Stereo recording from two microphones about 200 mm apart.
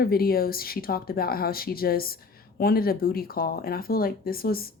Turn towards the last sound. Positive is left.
turn(degrees=50)  # may be behind; listen again after turning